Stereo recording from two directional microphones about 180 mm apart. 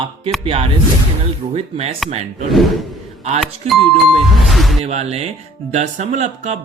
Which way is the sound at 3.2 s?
40° right (ahead or behind).